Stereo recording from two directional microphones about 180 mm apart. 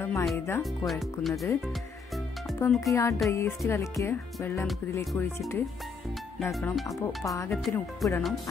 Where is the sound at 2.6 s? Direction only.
15° left (ahead or behind).